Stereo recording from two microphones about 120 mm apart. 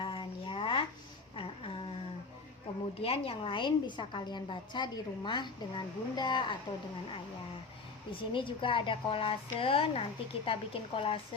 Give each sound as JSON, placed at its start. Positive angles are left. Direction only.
{"t": 0.0, "sound": "a sound", "side_deg": 45}
{"t": 3.0, "sound": "a woman's voice", "side_deg": 50}
{"t": 8.1, "sound": "a woman's voice", "side_deg": 45}